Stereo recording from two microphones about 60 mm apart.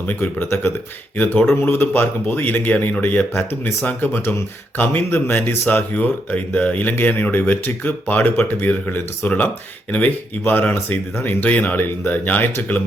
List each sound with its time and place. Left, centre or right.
0.1 s speech: left
1.1 s speech: left
10.4 s speech: left